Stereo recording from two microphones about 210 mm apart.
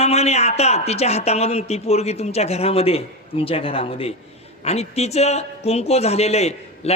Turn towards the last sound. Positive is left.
turn(degrees=30)  # may be behind; listen again after turning